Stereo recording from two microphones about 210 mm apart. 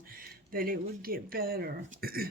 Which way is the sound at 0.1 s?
45° right (ahead or behind).